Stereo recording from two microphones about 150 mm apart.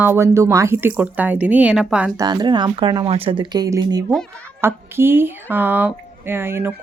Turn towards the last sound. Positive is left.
turn(degrees=-15)  # may be behind; listen again after turning